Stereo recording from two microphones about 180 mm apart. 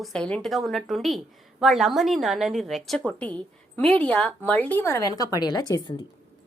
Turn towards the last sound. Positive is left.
turn(degrees=25)  # may be behind; listen again after turning